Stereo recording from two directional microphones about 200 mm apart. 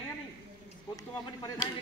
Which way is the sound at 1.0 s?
20° left (ahead or behind).